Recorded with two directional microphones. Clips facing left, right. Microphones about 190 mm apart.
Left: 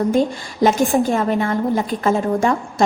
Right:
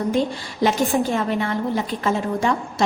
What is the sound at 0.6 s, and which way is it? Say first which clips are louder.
A woman's voice: left 4 dB; 45° left (ahead or behind).